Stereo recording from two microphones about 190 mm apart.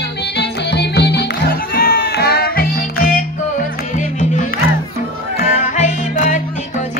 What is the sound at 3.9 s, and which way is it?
Music, 40° left (ahead or behind).